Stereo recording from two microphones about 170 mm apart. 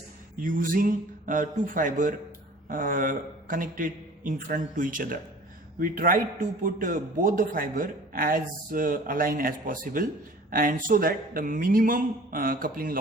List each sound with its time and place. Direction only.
0.4 s a man's voice: 55° right (ahead or behind)